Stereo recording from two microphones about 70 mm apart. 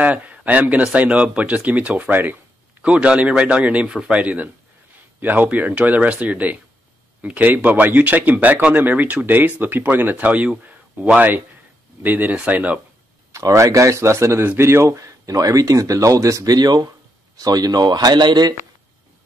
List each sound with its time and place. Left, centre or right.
0.0 s a man's voice: right
13.3 s speech: right
15.0 s speech: right
16.5 s speech: right
17.4 s speech: right